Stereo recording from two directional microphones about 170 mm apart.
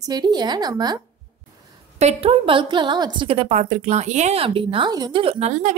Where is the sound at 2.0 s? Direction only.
35° right (ahead or behind).